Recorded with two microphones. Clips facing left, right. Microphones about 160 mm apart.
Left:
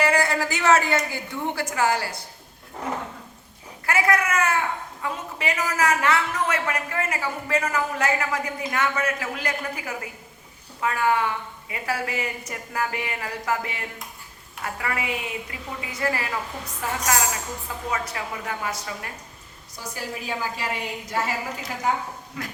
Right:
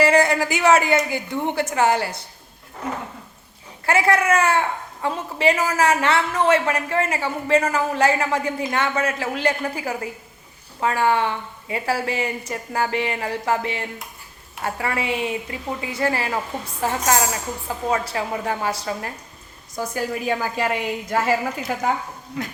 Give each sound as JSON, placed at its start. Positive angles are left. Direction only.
{"t": 0.0, "sound": "a man's voice", "side_deg": -20}
{"t": 3.8, "sound": "a woman's voice", "side_deg": -30}
{"t": 19.7, "sound": "a woman's voice", "side_deg": -50}